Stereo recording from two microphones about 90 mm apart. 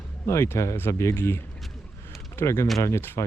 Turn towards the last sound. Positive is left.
turn(degrees=35)  # may be behind; listen again after turning